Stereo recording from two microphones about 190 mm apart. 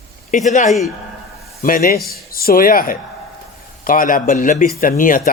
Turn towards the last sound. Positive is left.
turn(degrees=45)  # may be behind; listen again after turning